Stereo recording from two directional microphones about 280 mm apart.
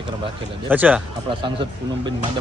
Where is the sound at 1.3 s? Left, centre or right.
Centre.